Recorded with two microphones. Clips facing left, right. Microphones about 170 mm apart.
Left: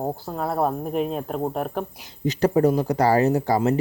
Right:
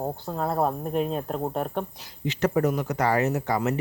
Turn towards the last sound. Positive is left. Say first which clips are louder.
# left 5 dB
turn(degrees=35)  # may be behind; listen again after turning